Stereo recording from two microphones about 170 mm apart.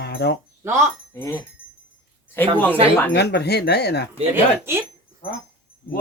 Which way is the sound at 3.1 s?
75° left (ahead or behind).